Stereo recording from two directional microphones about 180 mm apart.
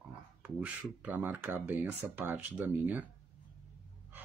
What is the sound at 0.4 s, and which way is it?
Speech, 10° right (ahead or behind).